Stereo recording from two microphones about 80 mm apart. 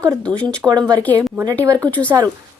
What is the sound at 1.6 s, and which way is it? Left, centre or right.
Speech, right.